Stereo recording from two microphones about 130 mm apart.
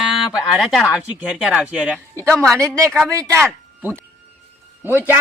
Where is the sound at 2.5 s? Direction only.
20° right (ahead or behind).